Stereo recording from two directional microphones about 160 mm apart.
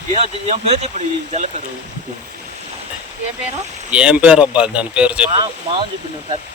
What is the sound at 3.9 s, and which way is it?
Speech, 5° right (ahead or behind).